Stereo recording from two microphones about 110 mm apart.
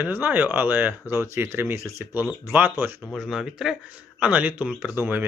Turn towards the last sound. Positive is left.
turn(degrees=-15)  # may be behind; listen again after turning